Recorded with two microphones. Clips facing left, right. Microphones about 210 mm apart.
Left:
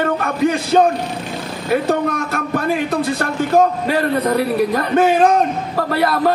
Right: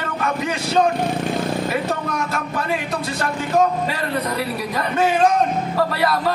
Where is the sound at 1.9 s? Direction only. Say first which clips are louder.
Left 6 dB; 55° left (ahead or behind).